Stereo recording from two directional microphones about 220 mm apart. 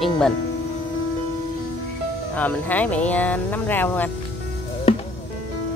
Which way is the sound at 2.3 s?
5° left (ahead or behind).